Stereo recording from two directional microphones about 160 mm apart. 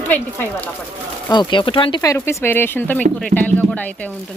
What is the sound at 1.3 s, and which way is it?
Speech, 30° left (ahead or behind).